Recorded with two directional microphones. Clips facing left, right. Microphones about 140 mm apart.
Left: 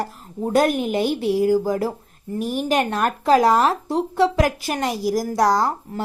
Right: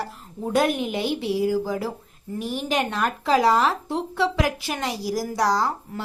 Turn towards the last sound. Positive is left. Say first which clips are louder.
# left 3 dB
turn(degrees=50)  # may be behind; listen again after turning